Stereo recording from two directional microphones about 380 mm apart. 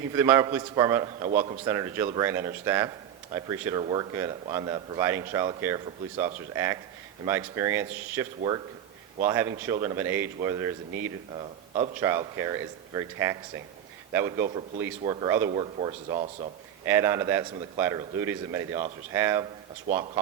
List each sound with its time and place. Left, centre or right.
0.1 s speech: centre